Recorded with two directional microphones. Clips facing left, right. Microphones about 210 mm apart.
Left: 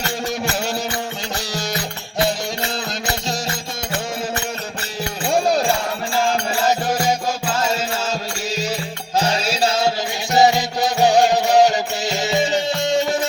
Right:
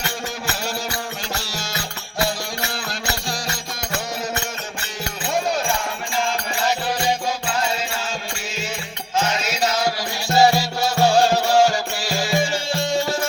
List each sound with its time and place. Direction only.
1.4 s music: 15° left (ahead or behind)
3.2 s music: 25° left (ahead or behind)
5.2 s music: 35° left (ahead or behind)
6.8 s music: 45° left (ahead or behind)
9.1 s music: 35° left (ahead or behind)